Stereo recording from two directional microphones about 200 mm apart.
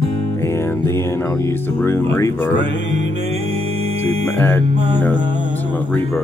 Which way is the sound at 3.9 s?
10° left (ahead or behind).